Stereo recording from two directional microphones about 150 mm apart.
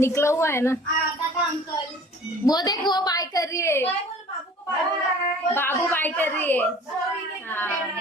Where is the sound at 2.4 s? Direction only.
25° left (ahead or behind).